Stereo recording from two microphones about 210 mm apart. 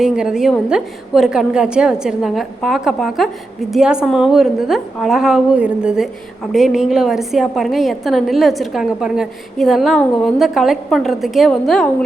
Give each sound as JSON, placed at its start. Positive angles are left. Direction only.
{"t": 0.0, "sound": "a woman's voice", "side_deg": -5}